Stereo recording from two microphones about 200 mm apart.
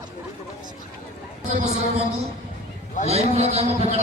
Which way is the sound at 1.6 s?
35° right (ahead or behind).